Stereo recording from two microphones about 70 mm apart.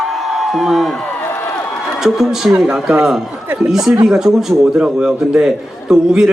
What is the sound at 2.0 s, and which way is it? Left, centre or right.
A man's voice, centre.